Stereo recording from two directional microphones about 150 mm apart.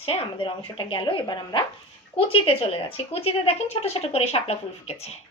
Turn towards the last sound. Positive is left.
turn(degrees=45)  # may be behind; listen again after turning